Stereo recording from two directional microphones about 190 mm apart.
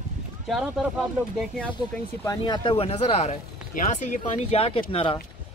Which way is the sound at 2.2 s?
25° left (ahead or behind).